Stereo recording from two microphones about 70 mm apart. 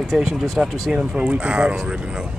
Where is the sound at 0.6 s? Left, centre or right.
Centre.